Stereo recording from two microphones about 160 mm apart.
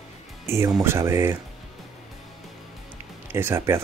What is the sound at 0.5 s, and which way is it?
Speech, 15° right (ahead or behind).